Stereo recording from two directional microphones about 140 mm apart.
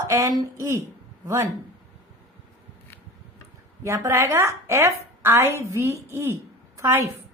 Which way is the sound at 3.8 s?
20° right (ahead or behind).